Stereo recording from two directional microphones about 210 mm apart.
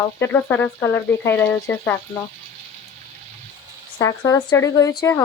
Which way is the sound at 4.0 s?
15° left (ahead or behind).